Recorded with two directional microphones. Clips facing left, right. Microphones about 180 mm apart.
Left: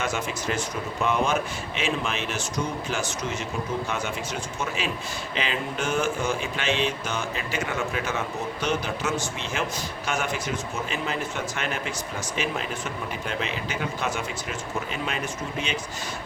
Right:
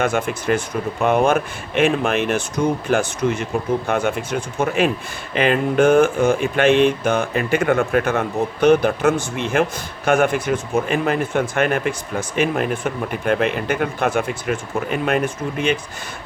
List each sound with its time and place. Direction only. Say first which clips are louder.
0.0 s speech: right 8 dB; 55° right (ahead or behind)